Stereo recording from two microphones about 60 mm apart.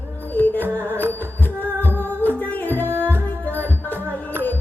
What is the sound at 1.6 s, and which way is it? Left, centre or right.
Music, right.